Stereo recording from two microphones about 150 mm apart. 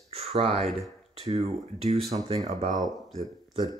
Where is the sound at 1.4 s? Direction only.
40° right (ahead or behind).